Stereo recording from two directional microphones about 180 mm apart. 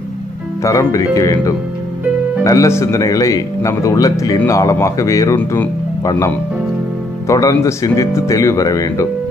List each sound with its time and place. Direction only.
0.6 s speech: 15° left (ahead or behind)